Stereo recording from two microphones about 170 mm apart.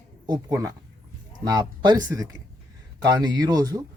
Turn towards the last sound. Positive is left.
turn(degrees=-20)  # may be behind; listen again after turning